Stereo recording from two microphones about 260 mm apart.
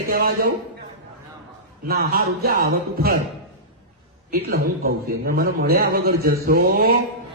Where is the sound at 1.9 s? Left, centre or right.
Right.